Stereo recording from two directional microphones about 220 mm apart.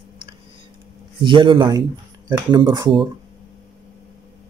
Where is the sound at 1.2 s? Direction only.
20° right (ahead or behind).